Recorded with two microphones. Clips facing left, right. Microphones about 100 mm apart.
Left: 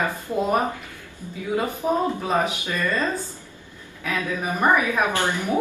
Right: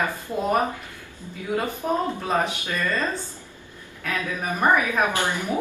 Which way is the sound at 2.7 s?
15° left (ahead or behind).